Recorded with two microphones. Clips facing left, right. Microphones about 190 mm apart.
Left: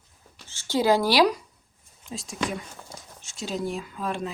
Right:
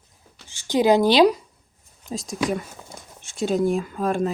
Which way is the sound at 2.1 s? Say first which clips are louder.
Right 6 dB; 40° right (ahead or behind).